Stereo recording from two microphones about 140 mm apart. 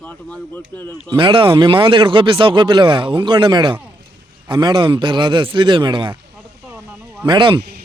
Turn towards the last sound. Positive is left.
turn(degrees=-35)  # may be behind; listen again after turning